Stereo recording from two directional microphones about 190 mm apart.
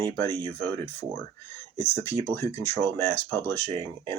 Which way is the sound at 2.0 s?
10° left (ahead or behind).